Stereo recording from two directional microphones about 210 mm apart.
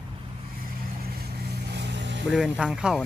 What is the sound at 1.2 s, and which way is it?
Vehicle, 55° right (ahead or behind).